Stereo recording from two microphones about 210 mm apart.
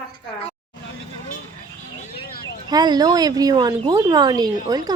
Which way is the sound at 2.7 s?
20° right (ahead or behind).